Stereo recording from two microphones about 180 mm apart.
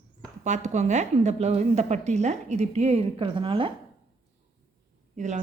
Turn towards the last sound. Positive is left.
turn(degrees=-40)  # may be behind; listen again after turning